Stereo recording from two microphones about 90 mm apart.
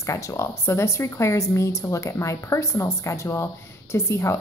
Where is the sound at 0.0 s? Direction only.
35° left (ahead or behind).